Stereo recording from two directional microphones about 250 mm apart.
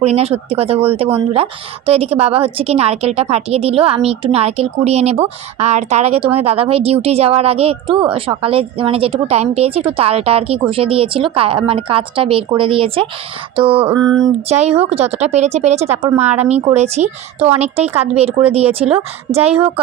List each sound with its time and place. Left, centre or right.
0.0 s a woman's voice: right